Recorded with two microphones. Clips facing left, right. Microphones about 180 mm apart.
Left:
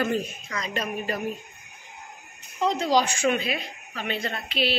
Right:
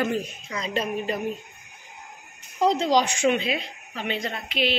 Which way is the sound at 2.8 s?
20° right (ahead or behind).